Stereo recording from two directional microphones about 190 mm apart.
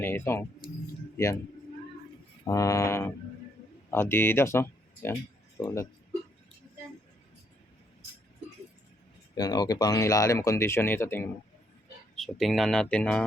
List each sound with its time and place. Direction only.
0.0 s a man's voice: 10° left (ahead or behind)
2.4 s speech: 15° left (ahead or behind)
9.3 s speech: 20° left (ahead or behind)
12.1 s speech: centre (ahead or behind)